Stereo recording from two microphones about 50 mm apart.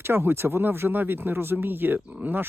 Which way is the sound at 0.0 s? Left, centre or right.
Right.